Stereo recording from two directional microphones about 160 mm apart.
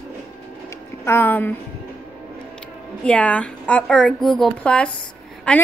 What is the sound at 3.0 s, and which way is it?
A woman's voice, 10° left (ahead or behind).